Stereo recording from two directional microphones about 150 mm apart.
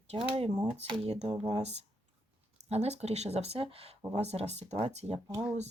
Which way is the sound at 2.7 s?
45° right (ahead or behind).